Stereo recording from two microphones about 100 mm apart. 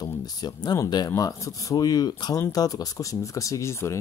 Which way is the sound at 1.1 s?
30° left (ahead or behind).